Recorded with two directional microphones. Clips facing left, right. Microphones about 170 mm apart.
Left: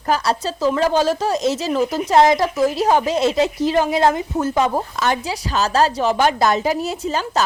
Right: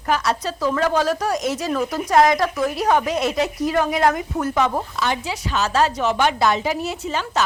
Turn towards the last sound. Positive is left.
turn(degrees=35)  # may be behind; listen again after turning